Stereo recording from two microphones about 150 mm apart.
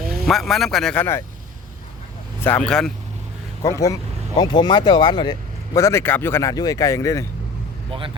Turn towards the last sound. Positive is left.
turn(degrees=20)  # may be behind; listen again after turning